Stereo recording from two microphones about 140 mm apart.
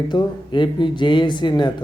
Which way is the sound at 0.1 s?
35° left (ahead or behind).